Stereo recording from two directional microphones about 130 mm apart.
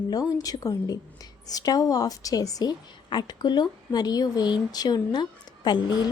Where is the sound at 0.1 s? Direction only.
25° left (ahead or behind).